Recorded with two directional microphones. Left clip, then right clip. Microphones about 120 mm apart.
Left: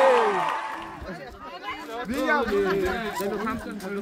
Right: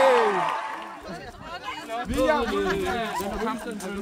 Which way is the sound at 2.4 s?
30° right (ahead or behind).